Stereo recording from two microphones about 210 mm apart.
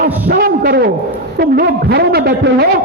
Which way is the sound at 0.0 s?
45° right (ahead or behind).